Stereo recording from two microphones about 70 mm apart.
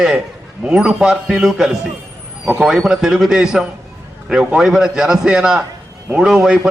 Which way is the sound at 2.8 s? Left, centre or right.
Centre.